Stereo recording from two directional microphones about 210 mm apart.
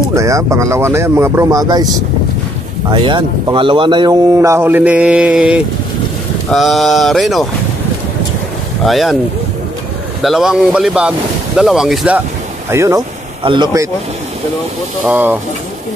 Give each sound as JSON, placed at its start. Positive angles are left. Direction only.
{"t": 0.1, "sound": "a man's voice", "side_deg": -15}
{"t": 2.9, "sound": "a man's voice", "side_deg": -20}
{"t": 8.8, "sound": "speech", "side_deg": 0}
{"t": 10.2, "sound": "speech", "side_deg": 0}
{"t": 12.6, "sound": "a man's voice", "side_deg": -15}
{"t": 15.0, "sound": "a man's voice", "side_deg": -10}